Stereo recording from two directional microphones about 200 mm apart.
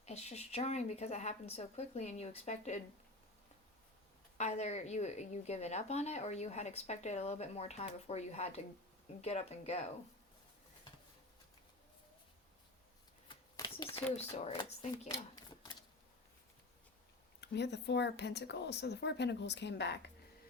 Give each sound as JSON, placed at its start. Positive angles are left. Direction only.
{"t": 0.0, "sound": "a woman's voice", "side_deg": 35}
{"t": 4.4, "sound": "a woman's voice", "side_deg": 35}
{"t": 13.2, "sound": "shuffling cards", "side_deg": 25}
{"t": 14.2, "sound": "a woman's voice", "side_deg": 30}
{"t": 17.4, "sound": "speech", "side_deg": 55}